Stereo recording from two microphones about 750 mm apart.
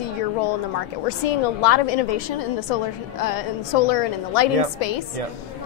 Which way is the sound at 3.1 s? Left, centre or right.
Left.